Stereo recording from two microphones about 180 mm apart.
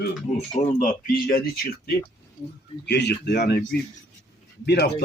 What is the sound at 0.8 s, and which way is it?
Speech, 50° left (ahead or behind).